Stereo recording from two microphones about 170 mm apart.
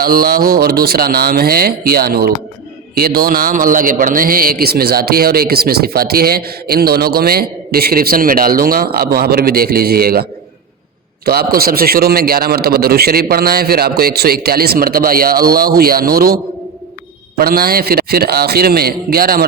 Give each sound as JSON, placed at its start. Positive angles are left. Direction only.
{"t": 0.0, "sound": "a man's voice", "side_deg": -60}
{"t": 11.3, "sound": "a man's voice", "side_deg": -60}